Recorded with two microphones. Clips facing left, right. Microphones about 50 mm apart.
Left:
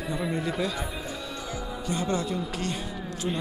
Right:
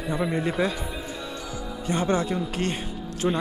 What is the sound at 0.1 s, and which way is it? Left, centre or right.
Speech, right.